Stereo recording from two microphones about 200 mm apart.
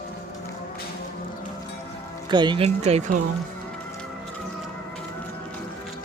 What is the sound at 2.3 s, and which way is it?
Speech, 20° right (ahead or behind).